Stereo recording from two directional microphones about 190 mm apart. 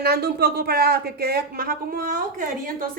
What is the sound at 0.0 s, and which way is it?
A woman's voice, 55° right (ahead or behind).